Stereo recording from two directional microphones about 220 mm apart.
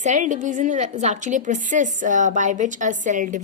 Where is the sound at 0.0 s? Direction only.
35° right (ahead or behind).